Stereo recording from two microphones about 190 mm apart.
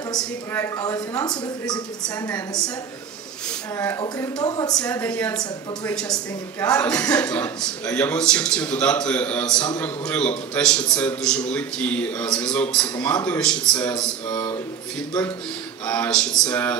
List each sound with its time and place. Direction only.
0.1 s speech: 15° left (ahead or behind)
3.7 s a man's voice: 15° left (ahead or behind)
15.8 s speech: 5° left (ahead or behind)